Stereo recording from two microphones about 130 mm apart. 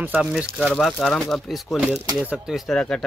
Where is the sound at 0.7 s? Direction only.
5° left (ahead or behind).